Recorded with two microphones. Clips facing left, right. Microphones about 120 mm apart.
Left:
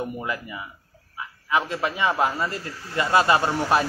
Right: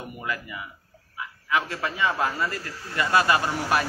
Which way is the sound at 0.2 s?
25° left (ahead or behind).